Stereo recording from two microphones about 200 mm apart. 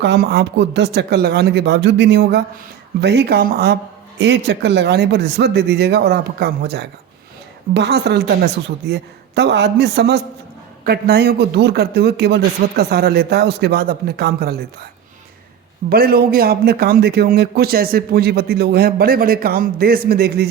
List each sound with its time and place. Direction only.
0.0 s a man's voice: 55° right (ahead or behind)
15.9 s a man's voice: 50° right (ahead or behind)